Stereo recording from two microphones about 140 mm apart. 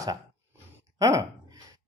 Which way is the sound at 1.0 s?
25° right (ahead or behind).